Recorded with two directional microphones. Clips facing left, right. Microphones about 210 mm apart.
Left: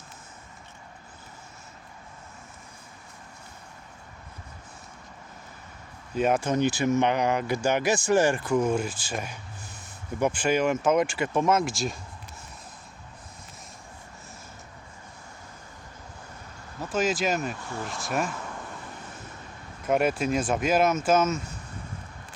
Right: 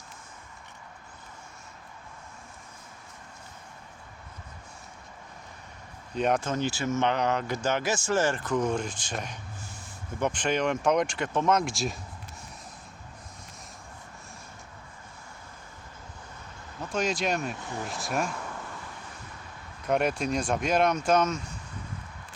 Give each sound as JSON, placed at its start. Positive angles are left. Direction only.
{"t": 6.1, "sound": "speech", "side_deg": 5}
{"t": 6.5, "sound": "speech", "side_deg": 15}
{"t": 16.8, "sound": "speech", "side_deg": 5}
{"t": 19.8, "sound": "speech", "side_deg": 5}